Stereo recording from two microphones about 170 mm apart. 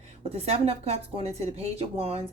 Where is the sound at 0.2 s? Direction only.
35° right (ahead or behind).